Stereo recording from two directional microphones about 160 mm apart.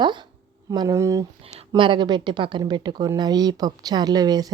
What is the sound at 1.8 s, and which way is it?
Speech, 30° right (ahead or behind).